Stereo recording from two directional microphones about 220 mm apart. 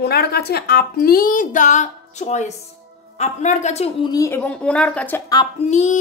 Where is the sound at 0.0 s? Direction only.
45° left (ahead or behind); by 5.4 s 10° left (ahead or behind).